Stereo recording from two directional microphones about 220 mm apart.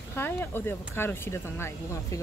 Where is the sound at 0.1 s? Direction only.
10° left (ahead or behind).